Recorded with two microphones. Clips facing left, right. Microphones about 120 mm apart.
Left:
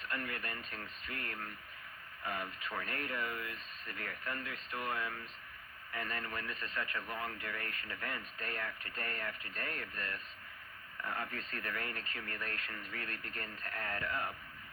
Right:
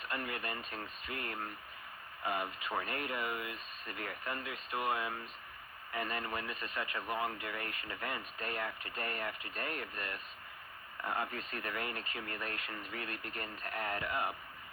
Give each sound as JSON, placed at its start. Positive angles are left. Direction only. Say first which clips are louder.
{"t": 0.0, "sound": "speech", "louder": "right 2 dB", "side_deg": -20}